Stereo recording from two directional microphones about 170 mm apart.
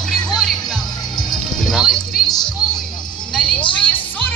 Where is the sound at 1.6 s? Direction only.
Centre (ahead or behind).